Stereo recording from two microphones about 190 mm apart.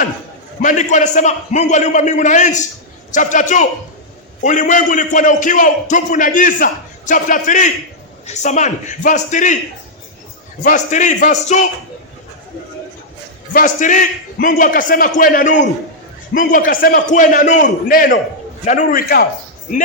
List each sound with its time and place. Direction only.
0.6 s a man's voice: 40° left (ahead or behind)
10.6 s a man's voice: 40° left (ahead or behind)
13.5 s a man's voice: 45° left (ahead or behind)